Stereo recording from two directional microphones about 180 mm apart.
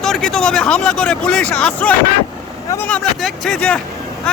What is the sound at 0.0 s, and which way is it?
Speech, 5° left (ahead or behind).